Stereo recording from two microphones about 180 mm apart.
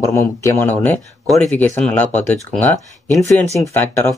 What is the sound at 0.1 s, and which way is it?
Speech, 15° left (ahead or behind).